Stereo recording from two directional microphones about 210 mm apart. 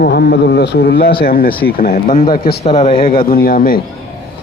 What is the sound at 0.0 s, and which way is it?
Speech, 50° left (ahead or behind).